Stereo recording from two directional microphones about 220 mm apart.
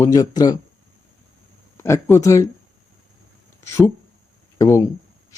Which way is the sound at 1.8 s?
10° left (ahead or behind).